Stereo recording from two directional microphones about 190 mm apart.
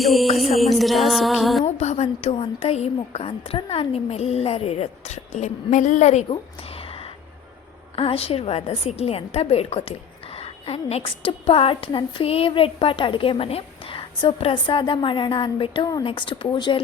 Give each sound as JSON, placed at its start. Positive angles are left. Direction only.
{"t": 0.0, "sound": "music", "side_deg": 0}
{"t": 1.6, "sound": "a woman's voice", "side_deg": 35}
{"t": 6.3, "sound": "a sound", "side_deg": 30}
{"t": 7.9, "sound": "a woman's voice", "side_deg": 30}